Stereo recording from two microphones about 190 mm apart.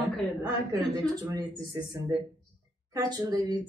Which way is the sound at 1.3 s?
20° right (ahead or behind).